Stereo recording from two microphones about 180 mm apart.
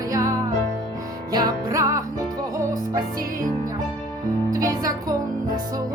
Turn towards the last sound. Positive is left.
turn(degrees=-20)  # may be behind; listen again after turning